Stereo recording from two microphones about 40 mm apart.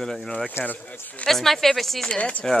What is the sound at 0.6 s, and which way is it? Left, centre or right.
Speech, left.